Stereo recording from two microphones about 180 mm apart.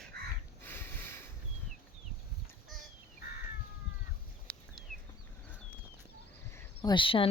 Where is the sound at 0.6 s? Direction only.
10° left (ahead or behind).